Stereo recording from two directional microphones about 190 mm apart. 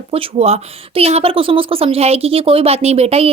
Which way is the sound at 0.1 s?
35° right (ahead or behind).